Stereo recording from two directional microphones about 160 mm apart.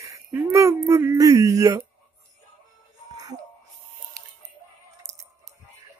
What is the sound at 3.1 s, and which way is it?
Music, 25° right (ahead or behind).